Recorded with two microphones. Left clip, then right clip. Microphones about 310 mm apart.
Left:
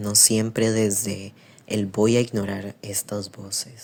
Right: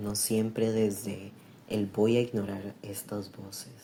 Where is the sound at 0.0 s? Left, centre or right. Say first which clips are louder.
Left 10 dB; left.